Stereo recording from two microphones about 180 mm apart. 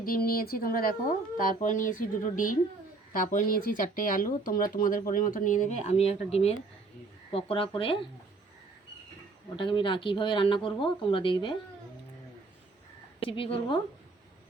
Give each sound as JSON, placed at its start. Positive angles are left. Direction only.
{"t": 0.0, "sound": "speech", "side_deg": 55}
{"t": 9.6, "sound": "speech", "side_deg": 25}
{"t": 13.1, "sound": "speech", "side_deg": 30}